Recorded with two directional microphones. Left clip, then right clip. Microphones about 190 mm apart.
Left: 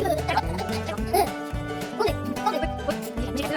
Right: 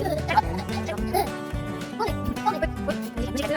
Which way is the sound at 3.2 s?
25° right (ahead or behind).